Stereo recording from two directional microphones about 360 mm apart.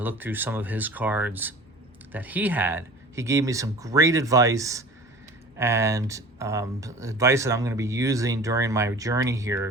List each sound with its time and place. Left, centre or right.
0.0 s speech: centre